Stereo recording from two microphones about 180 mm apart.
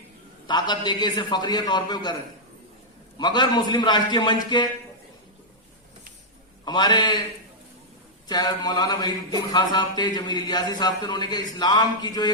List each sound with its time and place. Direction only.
0.4 s speech: 25° left (ahead or behind)
3.2 s speech: 25° left (ahead or behind)
6.7 s speech: 25° left (ahead or behind)
8.3 s speech: 20° left (ahead or behind)